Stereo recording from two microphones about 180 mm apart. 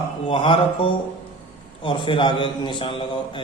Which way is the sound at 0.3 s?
30° left (ahead or behind).